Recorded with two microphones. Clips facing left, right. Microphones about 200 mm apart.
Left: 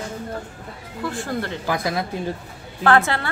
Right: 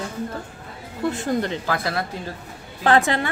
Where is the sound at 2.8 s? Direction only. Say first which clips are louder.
Even; 20° right (ahead or behind).